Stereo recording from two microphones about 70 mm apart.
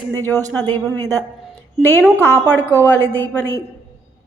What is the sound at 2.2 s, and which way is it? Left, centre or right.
Speech, right.